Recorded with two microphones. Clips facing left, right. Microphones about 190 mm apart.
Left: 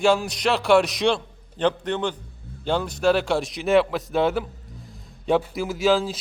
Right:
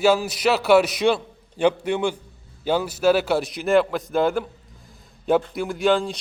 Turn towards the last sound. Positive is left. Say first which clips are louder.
# even
turn(degrees=0)  # may be behind; listen again after turning